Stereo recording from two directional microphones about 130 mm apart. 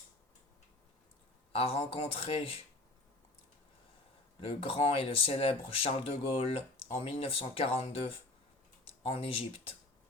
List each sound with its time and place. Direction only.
1.5 s speech: 45° left (ahead or behind)
4.4 s speech: 45° left (ahead or behind)